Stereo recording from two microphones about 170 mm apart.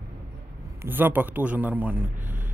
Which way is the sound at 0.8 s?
10° right (ahead or behind).